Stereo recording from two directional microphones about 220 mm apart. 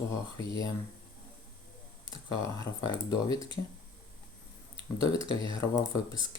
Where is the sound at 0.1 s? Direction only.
15° left (ahead or behind).